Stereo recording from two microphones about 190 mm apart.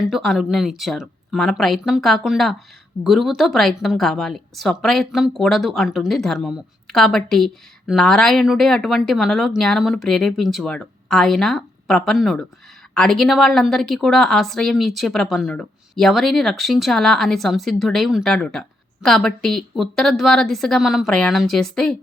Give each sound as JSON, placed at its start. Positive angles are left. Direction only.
{"t": 0.0, "sound": "a woman's voice", "side_deg": 0}